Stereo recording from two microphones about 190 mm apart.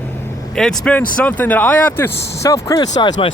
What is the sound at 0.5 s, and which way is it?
Speech, 5° left (ahead or behind).